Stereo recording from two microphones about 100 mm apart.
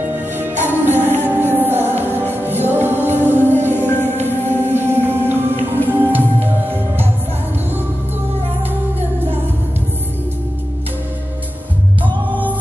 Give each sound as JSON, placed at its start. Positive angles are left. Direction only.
{"t": 0.4, "sound": "music", "side_deg": -20}
{"t": 12.0, "sound": "music", "side_deg": -15}